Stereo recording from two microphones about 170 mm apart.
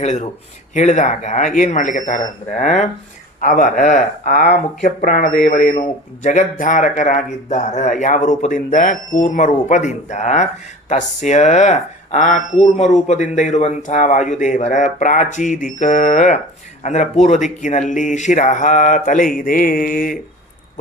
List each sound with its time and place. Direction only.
0.0 s speech: 45° left (ahead or behind)